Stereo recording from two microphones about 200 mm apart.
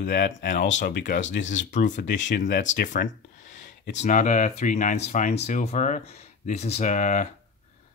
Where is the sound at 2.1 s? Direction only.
60° left (ahead or behind).